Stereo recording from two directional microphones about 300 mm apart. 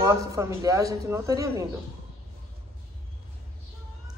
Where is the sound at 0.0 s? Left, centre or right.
Centre.